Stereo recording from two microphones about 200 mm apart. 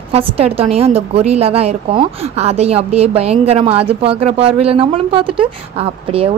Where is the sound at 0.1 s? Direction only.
30° right (ahead or behind).